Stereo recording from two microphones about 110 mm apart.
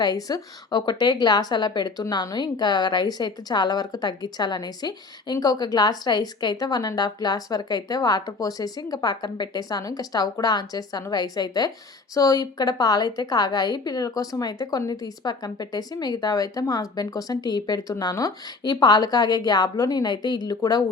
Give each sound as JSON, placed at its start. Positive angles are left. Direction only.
{"t": 0.0, "sound": "speech", "side_deg": 35}